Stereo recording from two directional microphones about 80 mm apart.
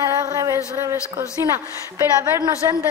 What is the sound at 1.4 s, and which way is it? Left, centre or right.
A woman's voice, right.